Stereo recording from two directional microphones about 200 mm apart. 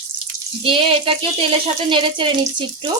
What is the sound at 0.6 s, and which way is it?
A woman's voice, 25° right (ahead or behind).